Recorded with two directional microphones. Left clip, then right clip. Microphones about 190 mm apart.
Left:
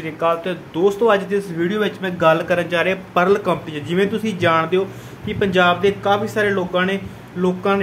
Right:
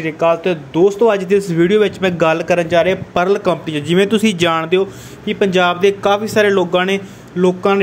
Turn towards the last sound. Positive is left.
turn(degrees=-35)  # may be behind; listen again after turning